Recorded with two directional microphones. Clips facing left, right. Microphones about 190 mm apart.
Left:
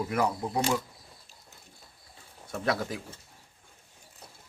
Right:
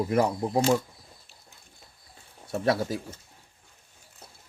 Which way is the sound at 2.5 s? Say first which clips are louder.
Right 4 dB; 30° right (ahead or behind).